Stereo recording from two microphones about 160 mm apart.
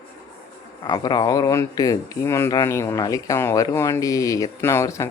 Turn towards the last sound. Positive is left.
turn(degrees=15)  # may be behind; listen again after turning